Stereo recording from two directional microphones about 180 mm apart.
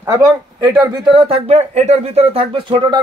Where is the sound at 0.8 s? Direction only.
30° right (ahead or behind).